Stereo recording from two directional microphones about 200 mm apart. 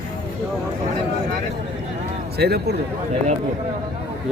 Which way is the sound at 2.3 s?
55° right (ahead or behind).